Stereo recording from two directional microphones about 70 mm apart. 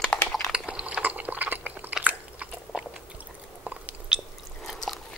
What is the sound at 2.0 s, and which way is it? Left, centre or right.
Biting, centre.